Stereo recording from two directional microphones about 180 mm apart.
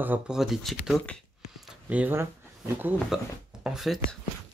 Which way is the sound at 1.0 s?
5° left (ahead or behind).